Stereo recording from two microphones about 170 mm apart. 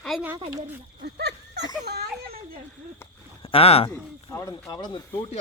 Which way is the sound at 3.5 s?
35° left (ahead or behind).